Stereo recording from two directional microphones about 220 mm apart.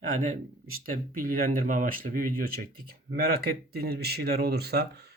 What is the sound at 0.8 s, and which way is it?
Speech, 40° right (ahead or behind).